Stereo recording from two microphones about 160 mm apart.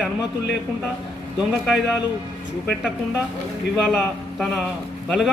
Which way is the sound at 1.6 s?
Centre (ahead or behind).